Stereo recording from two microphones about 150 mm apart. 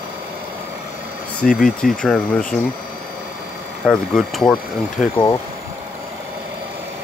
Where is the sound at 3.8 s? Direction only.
5° left (ahead or behind).